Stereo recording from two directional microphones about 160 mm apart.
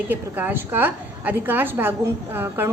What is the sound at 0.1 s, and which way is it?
A woman's voice, 10° right (ahead or behind).